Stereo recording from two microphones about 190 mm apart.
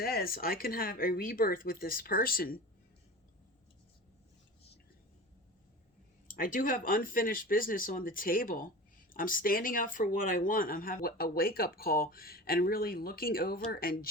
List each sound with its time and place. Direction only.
0.0 s speech: 55° left (ahead or behind)
6.2 s speech: 45° left (ahead or behind)